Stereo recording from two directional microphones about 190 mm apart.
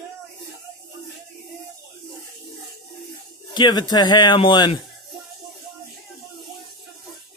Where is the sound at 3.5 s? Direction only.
25° left (ahead or behind).